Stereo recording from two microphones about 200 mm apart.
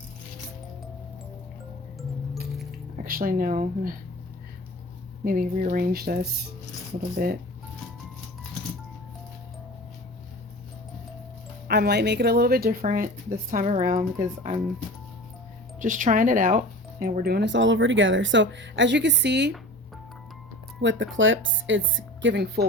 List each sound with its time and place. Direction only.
2.0 s music: centre (ahead or behind)
3.0 s speech: 45° right (ahead or behind)
5.2 s speech: 45° right (ahead or behind)
11.7 s speech: 55° right (ahead or behind); by 14.6 s 40° right (ahead or behind)
15.8 s speech: 40° right (ahead or behind); by 19.5 s 60° right (ahead or behind)
20.8 s speech: 70° right (ahead or behind)